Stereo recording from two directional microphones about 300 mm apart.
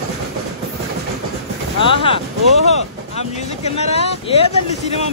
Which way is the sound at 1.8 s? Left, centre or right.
Centre.